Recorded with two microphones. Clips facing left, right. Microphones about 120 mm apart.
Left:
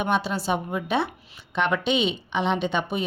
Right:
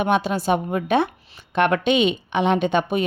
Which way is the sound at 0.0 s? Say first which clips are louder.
Right 4 dB; 50° right (ahead or behind).